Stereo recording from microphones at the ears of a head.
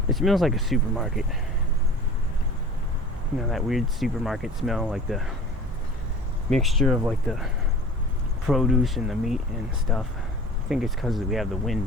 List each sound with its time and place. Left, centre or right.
0.1 s speech: centre
3.5 s speech: centre
6.5 s speech: centre
8.4 s speech: centre
10.7 s speech: centre